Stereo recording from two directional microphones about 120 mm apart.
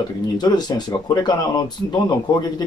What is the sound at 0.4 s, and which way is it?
Speech, 35° left (ahead or behind).